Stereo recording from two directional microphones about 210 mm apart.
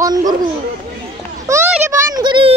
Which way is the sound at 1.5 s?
15° right (ahead or behind).